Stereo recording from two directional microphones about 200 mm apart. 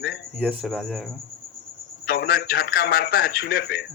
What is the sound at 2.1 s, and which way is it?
Speech, 50° left (ahead or behind).